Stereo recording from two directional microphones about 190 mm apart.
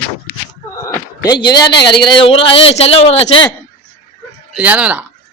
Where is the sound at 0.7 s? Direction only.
20° left (ahead or behind).